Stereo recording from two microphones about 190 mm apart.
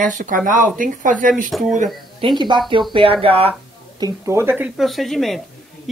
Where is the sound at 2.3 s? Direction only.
25° right (ahead or behind).